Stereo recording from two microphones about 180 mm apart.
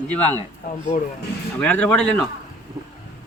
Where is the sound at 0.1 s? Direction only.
10° left (ahead or behind).